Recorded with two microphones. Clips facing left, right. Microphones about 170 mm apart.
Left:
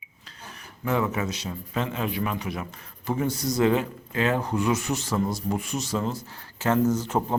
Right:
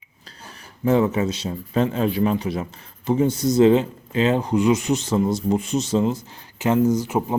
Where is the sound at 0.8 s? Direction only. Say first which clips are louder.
Right 7 dB; 30° right (ahead or behind).